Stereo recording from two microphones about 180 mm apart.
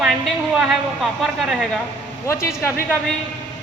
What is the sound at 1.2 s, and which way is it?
Speech, centre (ahead or behind).